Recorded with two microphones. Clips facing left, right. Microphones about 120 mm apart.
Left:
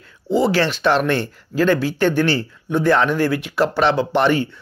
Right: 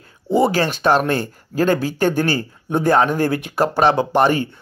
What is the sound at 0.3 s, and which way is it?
Speech, 50° right (ahead or behind).